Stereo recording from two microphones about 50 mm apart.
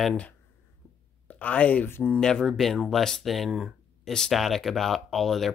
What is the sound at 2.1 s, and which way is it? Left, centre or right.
Speech, centre.